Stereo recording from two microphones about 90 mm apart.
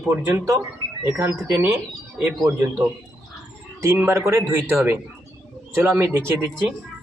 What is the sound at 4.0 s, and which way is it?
Speech, 30° right (ahead or behind).